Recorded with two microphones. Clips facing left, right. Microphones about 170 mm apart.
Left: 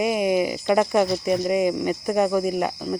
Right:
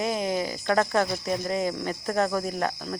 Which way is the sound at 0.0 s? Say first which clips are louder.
Left 6 dB; 15° left (ahead or behind).